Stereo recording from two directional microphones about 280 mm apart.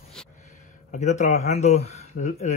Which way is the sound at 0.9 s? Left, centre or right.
Left.